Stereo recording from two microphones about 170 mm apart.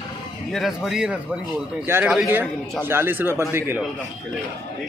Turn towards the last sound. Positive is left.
turn(degrees=-15)  # may be behind; listen again after turning